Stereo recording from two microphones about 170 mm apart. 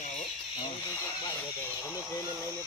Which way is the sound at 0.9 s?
15° left (ahead or behind).